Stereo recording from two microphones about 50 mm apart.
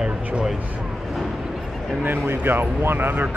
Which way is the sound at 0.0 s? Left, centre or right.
Centre.